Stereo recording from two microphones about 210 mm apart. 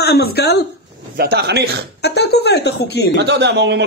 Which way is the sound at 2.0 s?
50° left (ahead or behind).